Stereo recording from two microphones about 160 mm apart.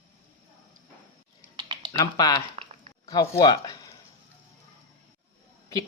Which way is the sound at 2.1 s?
25° left (ahead or behind).